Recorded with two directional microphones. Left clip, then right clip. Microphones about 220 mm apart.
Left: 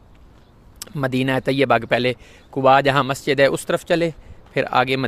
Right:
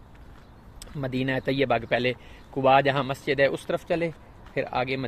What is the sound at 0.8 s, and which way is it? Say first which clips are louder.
Speech: left 8 dB; 35° left (ahead or behind).